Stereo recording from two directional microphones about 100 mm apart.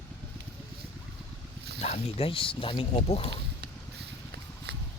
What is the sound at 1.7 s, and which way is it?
Speech, 90° left.